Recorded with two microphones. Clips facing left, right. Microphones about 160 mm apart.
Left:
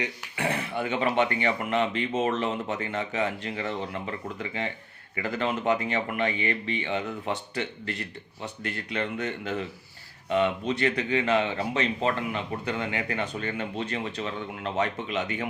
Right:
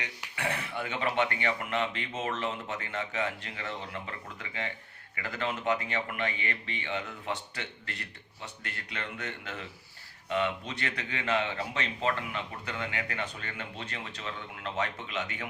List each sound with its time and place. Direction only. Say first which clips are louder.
0.0 s speech: left 6 dB; 25° left (ahead or behind)
5.1 s speech: left 6 dB; 25° left (ahead or behind)
8.9 s speech: left 9 dB; 20° left (ahead or behind)